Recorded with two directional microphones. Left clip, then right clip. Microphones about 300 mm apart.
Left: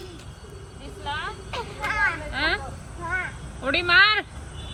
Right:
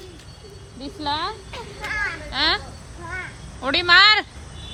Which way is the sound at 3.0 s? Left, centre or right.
Centre.